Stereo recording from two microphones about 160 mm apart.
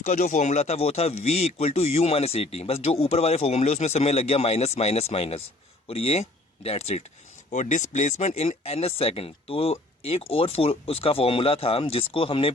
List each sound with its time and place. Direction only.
0.0 s speech: 45° left (ahead or behind)